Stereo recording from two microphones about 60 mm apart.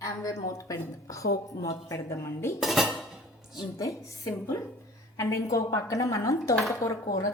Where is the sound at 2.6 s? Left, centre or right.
Centre.